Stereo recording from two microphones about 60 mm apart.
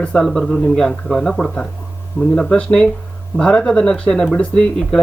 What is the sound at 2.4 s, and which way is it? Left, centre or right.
Speech, left.